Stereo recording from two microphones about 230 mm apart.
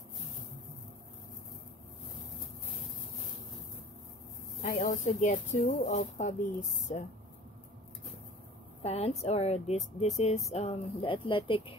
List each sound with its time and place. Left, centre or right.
4.6 s speech: left
8.8 s a woman's voice: left